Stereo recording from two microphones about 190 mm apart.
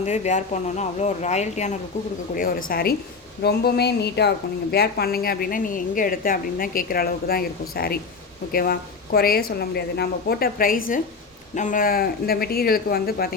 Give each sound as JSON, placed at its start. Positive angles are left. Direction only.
{"t": 0.0, "sound": "speech", "side_deg": 40}
{"t": 2.3, "sound": "a woman's voice", "side_deg": 50}